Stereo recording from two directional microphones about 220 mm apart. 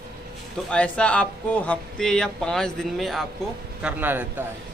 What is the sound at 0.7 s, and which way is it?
A man's voice, 5° left (ahead or behind).